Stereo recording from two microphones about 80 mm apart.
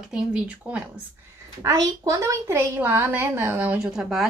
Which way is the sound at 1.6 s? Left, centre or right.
Right.